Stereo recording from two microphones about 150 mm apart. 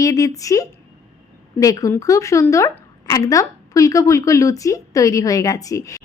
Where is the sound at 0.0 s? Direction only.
20° left (ahead or behind).